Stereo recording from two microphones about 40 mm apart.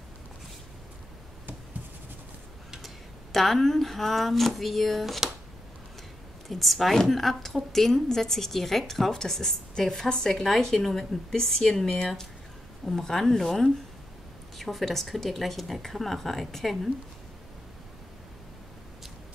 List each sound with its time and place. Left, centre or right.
2.8 s speech: centre
6.5 s a woman's voice: centre
10.0 s a woman's voice: left
10.3 s a woman's voice: centre